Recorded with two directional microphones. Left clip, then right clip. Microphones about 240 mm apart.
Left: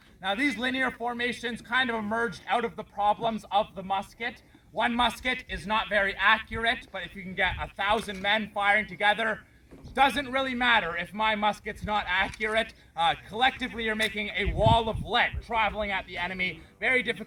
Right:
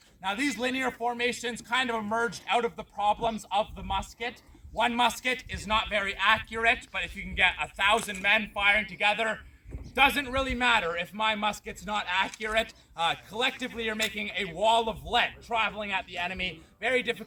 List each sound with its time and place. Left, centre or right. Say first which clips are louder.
0.2 s a man's voice: left 2 dB; centre